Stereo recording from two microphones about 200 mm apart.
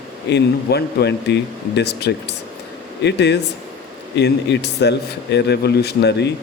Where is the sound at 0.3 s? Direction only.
55° left (ahead or behind).